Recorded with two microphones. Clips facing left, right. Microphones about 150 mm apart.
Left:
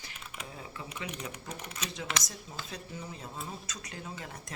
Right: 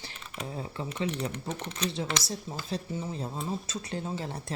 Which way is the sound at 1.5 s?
10° left (ahead or behind).